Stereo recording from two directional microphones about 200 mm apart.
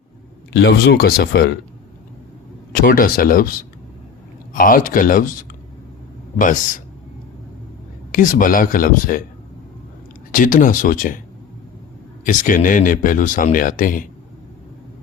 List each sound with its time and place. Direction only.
0.5 s speech: 55° left (ahead or behind)
2.8 s speech: 45° left (ahead or behind)
8.1 s speech: 40° left (ahead or behind)
10.3 s speech: 40° left (ahead or behind)
12.2 s speech: 40° left (ahead or behind)